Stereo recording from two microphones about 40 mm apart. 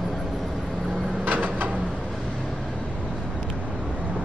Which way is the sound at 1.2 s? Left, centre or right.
Right.